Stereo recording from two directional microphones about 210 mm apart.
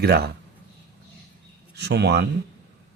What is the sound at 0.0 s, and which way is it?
Speech, 50° right (ahead or behind).